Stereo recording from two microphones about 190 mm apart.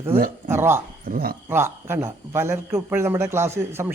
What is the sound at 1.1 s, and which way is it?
Speech, 50° right (ahead or behind).